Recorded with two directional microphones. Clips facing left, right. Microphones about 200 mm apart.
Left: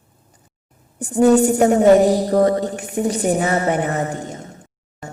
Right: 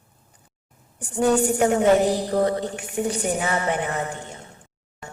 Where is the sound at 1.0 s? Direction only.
40° left (ahead or behind).